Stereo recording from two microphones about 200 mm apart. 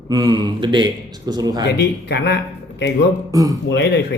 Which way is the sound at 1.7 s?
55° left (ahead or behind).